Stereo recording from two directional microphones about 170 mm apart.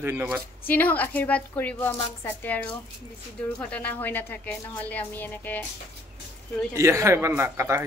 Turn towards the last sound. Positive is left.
turn(degrees=-15)  # may be behind; listen again after turning